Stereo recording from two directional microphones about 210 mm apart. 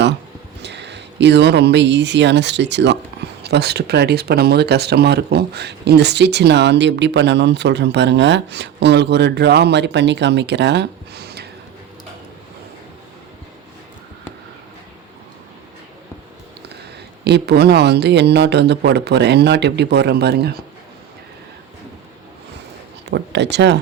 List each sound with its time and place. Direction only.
0.6 s speech: 55° right (ahead or behind)
17.2 s speech: 50° right (ahead or behind)
23.0 s speech: 55° right (ahead or behind)